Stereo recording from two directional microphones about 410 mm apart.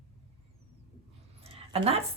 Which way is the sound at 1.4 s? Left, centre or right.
Centre.